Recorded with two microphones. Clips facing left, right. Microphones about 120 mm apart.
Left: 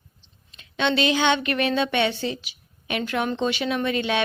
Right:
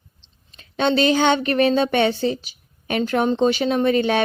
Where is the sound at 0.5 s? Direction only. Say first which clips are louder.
Right 4 dB; 40° right (ahead or behind).